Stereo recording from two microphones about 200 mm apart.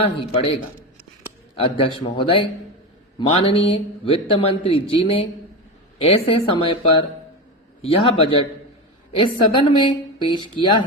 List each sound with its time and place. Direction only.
0.0 s speech: 25° left (ahead or behind)
1.5 s speech: 25° left (ahead or behind)
7.8 s speech: 30° left (ahead or behind)